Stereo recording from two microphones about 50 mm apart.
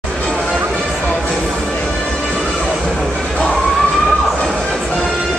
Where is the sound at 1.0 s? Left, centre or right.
Left.